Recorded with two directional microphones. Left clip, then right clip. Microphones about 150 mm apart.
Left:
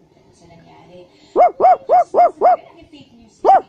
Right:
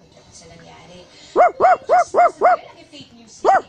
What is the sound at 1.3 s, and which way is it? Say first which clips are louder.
Dog: left 2 dB; 5° left (ahead or behind).